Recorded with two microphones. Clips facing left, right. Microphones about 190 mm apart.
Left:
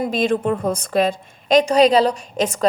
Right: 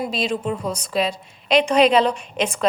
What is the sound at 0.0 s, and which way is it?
A woman's voice, 50° left (ahead or behind).